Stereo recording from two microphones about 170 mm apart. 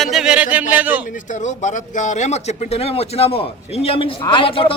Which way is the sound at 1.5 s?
45° left (ahead or behind).